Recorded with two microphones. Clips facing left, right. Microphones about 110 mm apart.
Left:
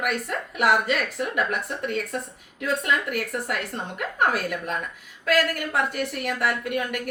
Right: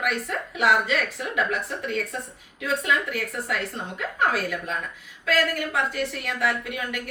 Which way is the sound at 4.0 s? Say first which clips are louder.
Left 1 dB; 55° left (ahead or behind).